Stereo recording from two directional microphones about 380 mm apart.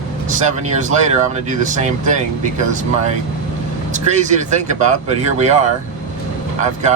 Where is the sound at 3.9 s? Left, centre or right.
Centre.